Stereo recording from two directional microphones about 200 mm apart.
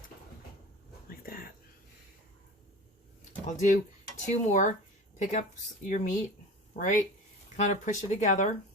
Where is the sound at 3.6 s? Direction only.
40° left (ahead or behind).